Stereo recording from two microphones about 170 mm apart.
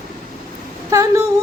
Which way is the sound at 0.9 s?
20° right (ahead or behind).